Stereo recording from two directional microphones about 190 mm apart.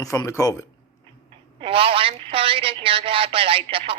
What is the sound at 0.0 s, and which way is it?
Speech, 15° left (ahead or behind).